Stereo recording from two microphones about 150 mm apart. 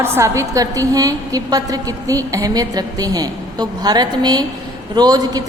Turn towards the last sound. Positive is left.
turn(degrees=-25)  # may be behind; listen again after turning